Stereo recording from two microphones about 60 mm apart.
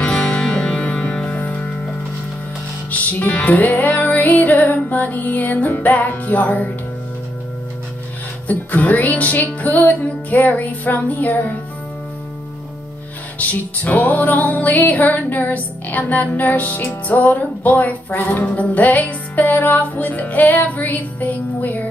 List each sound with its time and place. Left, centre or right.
0.2 s music: centre
2.9 s music: left
8.5 s music: left
13.4 s music: left